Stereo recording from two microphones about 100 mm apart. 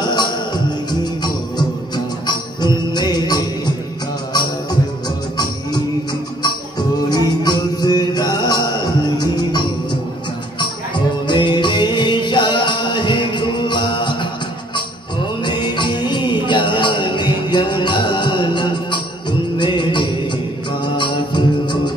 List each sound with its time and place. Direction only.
0.0 s music: 45° left (ahead or behind)
7.1 s music: 45° left (ahead or behind)
11.2 s music: 50° left (ahead or behind)
15.4 s music: 50° left (ahead or behind)